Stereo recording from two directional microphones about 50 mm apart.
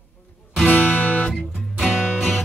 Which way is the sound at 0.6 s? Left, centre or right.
Left.